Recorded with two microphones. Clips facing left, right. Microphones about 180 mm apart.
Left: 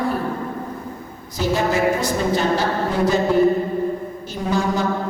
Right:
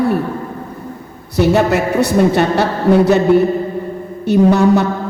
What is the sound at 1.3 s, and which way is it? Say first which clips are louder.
A woman's voice: right 7 dB; 65° right (ahead or behind).